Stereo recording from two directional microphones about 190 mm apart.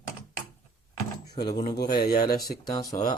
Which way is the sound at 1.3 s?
25° left (ahead or behind).